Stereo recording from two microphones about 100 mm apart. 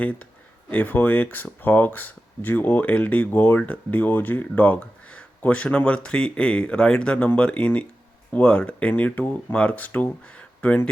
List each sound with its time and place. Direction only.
0.7 s speech: 15° left (ahead or behind)